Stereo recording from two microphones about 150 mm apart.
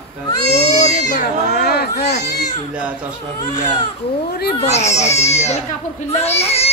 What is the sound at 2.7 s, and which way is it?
Speech, 10° right (ahead or behind).